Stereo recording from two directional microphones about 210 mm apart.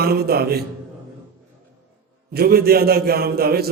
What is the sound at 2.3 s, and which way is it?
A man's voice, 45° right (ahead or behind).